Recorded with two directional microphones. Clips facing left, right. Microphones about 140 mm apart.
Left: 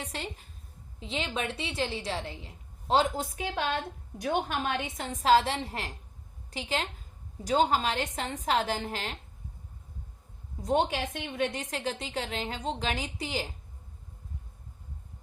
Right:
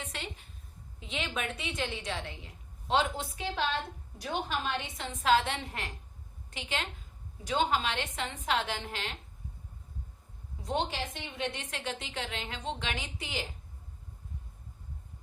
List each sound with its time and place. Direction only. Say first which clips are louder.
0.0 s a woman's voice: left 3 dB; 35° left (ahead or behind)
10.6 s a woman's voice: left 6 dB; 45° left (ahead or behind)